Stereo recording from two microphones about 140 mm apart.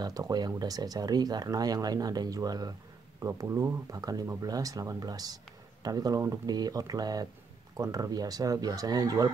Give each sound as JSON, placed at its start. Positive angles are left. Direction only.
{"t": 0.0, "sound": "speech", "side_deg": -25}